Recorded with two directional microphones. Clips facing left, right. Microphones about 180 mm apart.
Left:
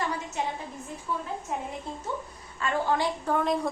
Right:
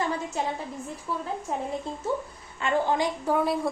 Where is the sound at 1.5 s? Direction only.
35° right (ahead or behind).